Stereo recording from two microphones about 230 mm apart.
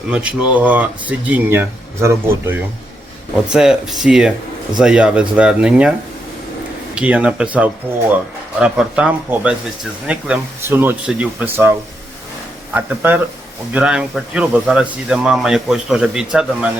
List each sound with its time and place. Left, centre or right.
0.1 s speech: centre
6.9 s speech: centre